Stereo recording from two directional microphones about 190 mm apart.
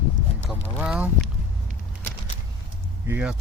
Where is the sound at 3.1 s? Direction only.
5° right (ahead or behind).